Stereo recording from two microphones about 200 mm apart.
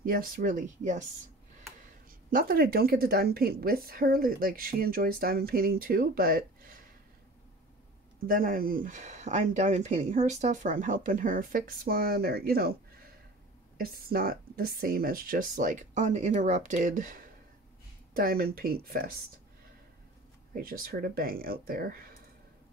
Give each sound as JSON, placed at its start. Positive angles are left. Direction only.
{"t": 0.0, "sound": "speech", "side_deg": -45}
{"t": 2.0, "sound": "speech", "side_deg": -45}
{"t": 8.3, "sound": "speech", "side_deg": -45}
{"t": 20.5, "sound": "speech", "side_deg": -45}